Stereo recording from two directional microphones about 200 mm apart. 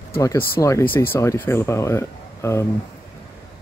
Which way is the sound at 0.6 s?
15° left (ahead or behind).